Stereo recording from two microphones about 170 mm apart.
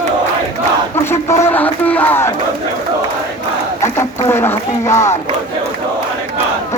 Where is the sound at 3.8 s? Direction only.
15° left (ahead or behind).